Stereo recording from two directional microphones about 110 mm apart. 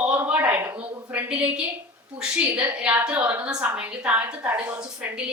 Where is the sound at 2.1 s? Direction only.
10° right (ahead or behind).